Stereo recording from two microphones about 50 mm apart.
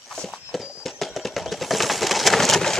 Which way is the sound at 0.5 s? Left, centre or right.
Centre.